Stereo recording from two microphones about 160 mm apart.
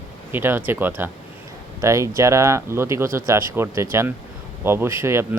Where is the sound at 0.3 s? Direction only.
10° right (ahead or behind).